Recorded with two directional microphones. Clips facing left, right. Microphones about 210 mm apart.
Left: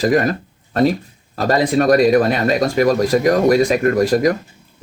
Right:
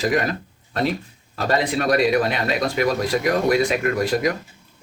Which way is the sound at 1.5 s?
45° left (ahead or behind).